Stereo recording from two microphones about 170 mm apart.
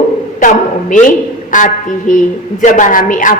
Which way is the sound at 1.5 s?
50° left (ahead or behind).